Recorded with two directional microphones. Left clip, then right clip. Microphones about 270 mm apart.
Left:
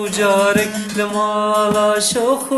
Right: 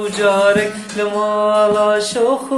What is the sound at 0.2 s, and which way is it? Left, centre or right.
Mantra, left.